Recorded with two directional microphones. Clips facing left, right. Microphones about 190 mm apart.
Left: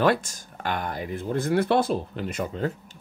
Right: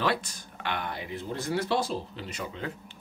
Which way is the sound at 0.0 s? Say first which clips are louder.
Left 7 dB; 45° left (ahead or behind).